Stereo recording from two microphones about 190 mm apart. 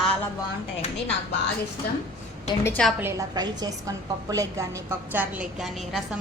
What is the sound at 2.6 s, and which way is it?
Speech, 5° left (ahead or behind).